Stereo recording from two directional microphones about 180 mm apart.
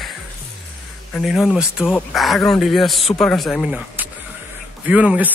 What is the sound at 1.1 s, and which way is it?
Speech, centre (ahead or behind).